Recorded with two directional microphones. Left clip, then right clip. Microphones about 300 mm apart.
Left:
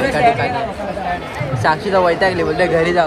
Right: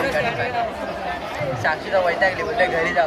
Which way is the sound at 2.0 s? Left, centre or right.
Centre.